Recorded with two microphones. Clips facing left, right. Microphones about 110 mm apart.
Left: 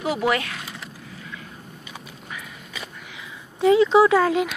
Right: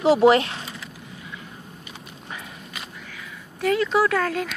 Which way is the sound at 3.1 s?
20° left (ahead or behind).